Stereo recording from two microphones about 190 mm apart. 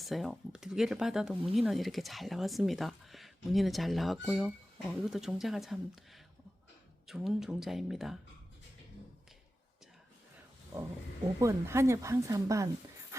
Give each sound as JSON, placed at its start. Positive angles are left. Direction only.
{"t": 0.0, "sound": "speech", "side_deg": 0}
{"t": 7.1, "sound": "speech", "side_deg": 0}
{"t": 11.3, "sound": "speech", "side_deg": -15}